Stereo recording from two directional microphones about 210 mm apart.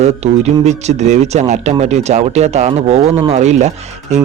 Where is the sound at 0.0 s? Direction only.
30° right (ahead or behind).